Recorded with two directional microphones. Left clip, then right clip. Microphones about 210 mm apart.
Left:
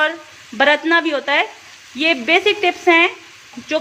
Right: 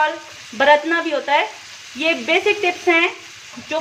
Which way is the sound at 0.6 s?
30° left (ahead or behind).